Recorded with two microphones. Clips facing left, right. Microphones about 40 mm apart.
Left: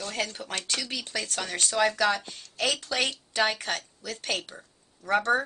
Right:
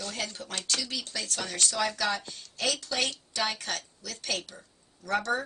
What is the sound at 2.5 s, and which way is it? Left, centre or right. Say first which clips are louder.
A woman's voice: left 3 dB; left.